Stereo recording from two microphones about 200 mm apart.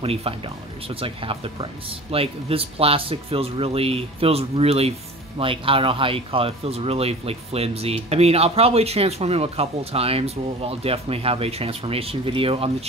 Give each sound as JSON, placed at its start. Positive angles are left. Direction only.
{"t": 0.0, "sound": "speech", "side_deg": -30}